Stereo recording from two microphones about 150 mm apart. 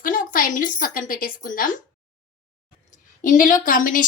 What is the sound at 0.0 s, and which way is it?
A woman's voice, 60° left (ahead or behind).